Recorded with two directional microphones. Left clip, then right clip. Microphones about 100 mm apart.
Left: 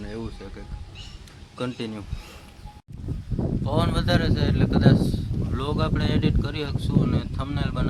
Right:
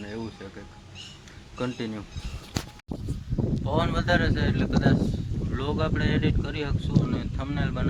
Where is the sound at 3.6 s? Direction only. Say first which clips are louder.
Even; 30° left (ahead or behind).